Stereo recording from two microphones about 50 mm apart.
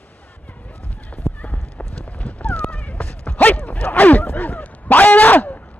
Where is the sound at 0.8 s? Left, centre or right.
Left.